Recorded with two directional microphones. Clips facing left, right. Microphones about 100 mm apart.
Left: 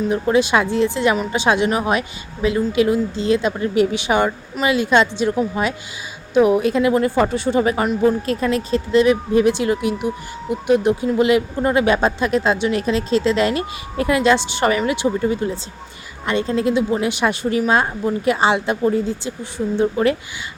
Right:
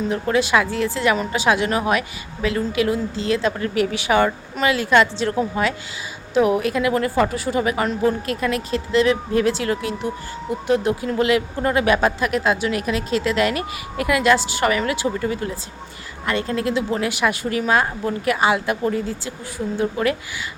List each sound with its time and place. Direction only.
0.1 s speech: 20° left (ahead or behind)
6.6 s speech: 25° left (ahead or behind)